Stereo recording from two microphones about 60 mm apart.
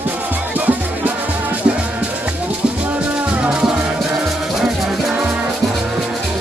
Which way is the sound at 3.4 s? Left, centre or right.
Centre.